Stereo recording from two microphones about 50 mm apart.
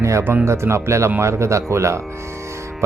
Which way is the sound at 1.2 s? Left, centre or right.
Right.